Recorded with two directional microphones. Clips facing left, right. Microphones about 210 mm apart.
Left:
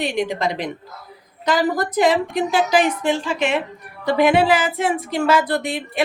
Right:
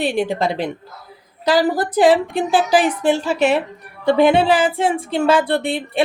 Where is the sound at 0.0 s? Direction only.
30° right (ahead or behind).